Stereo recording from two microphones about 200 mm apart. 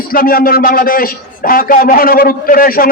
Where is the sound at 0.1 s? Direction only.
45° left (ahead or behind).